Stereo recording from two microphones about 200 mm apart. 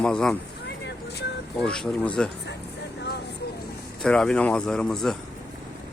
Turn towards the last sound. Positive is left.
turn(degrees=0)  # may be behind; listen again after turning